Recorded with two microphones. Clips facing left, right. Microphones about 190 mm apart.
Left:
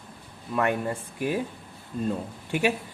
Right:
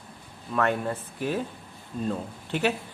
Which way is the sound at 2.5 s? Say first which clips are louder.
Left 1 dB; 10° left (ahead or behind).